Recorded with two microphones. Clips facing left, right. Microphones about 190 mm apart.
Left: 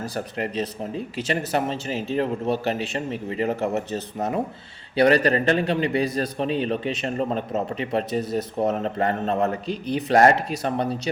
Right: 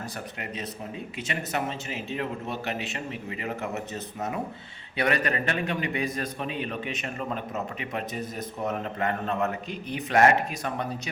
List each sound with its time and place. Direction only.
0.0 s a man's voice: 35° left (ahead or behind)